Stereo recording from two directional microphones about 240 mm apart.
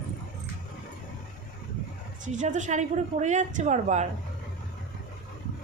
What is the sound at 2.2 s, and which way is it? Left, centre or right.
A woman's voice, right.